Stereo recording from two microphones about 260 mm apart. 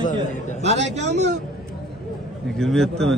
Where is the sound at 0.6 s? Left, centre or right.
Right.